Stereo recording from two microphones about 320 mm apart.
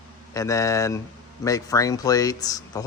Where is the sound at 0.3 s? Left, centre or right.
Centre.